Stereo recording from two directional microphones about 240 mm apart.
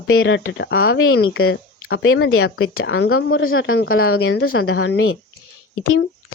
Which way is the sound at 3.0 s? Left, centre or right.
Left.